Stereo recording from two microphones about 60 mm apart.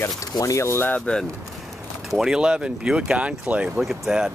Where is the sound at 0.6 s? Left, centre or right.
Left.